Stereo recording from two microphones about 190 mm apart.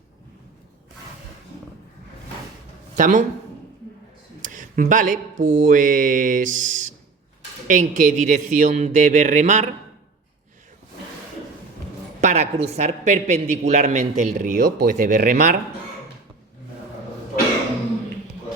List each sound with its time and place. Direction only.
3.0 s speech: 45° right (ahead or behind)
4.4 s a man's voice: 45° right (ahead or behind)
12.2 s a man's voice: 35° right (ahead or behind)